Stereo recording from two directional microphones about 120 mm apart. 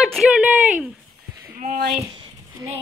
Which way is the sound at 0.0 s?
Centre (ahead or behind).